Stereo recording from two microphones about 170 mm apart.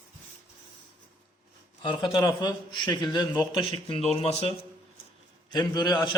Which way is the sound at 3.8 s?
35° left (ahead or behind).